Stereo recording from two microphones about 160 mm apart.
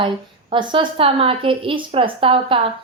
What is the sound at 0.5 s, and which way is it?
Speech, 30° right (ahead or behind).